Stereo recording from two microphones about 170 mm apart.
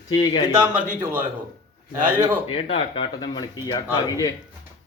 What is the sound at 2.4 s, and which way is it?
Speech, 35° left (ahead or behind).